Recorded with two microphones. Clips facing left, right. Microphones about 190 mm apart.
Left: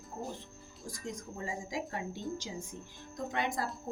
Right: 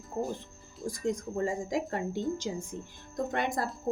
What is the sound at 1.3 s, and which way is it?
Speech, 55° right (ahead or behind).